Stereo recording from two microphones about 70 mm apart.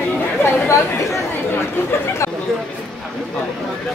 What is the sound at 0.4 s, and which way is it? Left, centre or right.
Speech, left.